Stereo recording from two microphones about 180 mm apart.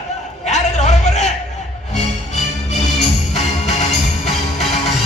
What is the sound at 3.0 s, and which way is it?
Music, 40° left (ahead or behind).